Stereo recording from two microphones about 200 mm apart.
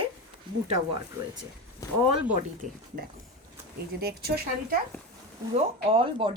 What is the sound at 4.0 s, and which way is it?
Speech, 50° right (ahead or behind).